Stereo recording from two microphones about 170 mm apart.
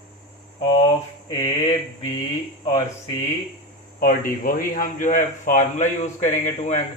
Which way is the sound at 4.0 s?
55° left (ahead or behind).